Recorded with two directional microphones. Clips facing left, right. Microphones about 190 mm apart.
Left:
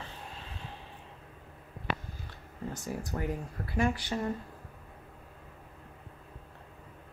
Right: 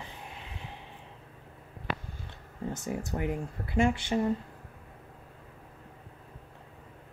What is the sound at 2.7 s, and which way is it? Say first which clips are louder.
Speech: right 3 dB; 25° right (ahead or behind).